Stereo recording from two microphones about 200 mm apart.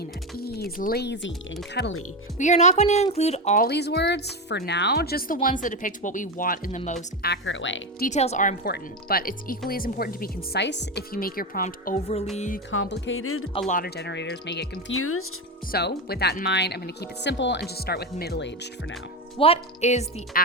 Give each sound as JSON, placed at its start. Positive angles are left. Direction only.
{"t": 0.0, "sound": "speech", "side_deg": 50}
{"t": 2.4, "sound": "speech", "side_deg": 35}
{"t": 3.7, "sound": "speech", "side_deg": 55}
{"t": 7.3, "sound": "speech", "side_deg": 70}
{"t": 8.0, "sound": "speech", "side_deg": 35}
{"t": 12.7, "sound": "speech", "side_deg": 75}
{"t": 13.7, "sound": "speech", "side_deg": 45}
{"t": 15.7, "sound": "speech", "side_deg": 55}
{"t": 19.4, "sound": "speech", "side_deg": 30}